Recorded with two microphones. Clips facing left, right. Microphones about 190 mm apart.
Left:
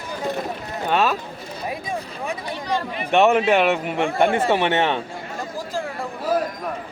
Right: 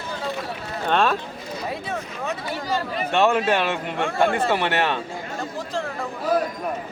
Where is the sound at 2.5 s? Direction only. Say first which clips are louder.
Left 1 dB; 5° right (ahead or behind).